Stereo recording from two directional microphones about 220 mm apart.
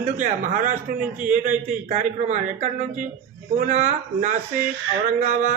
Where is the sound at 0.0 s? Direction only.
35° right (ahead or behind).